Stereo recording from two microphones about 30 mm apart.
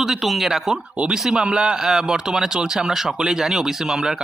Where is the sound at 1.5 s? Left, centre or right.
Right.